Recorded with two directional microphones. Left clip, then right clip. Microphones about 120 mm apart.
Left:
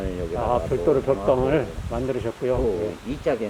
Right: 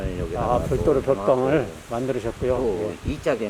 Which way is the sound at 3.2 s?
35° right (ahead or behind).